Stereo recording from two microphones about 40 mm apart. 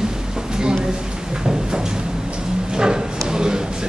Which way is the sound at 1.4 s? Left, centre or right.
Centre.